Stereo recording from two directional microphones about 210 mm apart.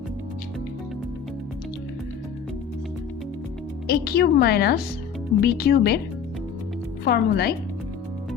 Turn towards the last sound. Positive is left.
turn(degrees=50)  # may be behind; listen again after turning